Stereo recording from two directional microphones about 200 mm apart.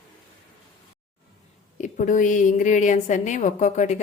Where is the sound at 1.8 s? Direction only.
40° left (ahead or behind).